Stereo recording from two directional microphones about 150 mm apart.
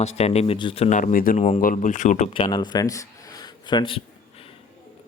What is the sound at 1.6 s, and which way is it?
Speech, 60° left (ahead or behind).